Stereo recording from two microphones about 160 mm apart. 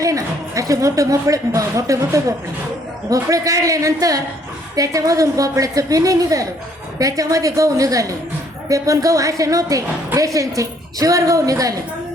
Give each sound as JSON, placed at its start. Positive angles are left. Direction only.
{"t": 0.0, "sound": "a woman's voice", "side_deg": -20}